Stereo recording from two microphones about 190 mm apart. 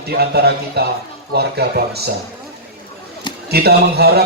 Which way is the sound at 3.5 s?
55° right (ahead or behind).